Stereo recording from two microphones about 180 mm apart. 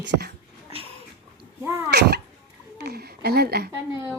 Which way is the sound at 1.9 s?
65° right (ahead or behind).